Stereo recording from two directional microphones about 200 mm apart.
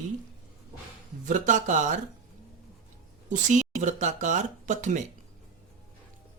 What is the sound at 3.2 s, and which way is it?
Speech, 35° right (ahead or behind).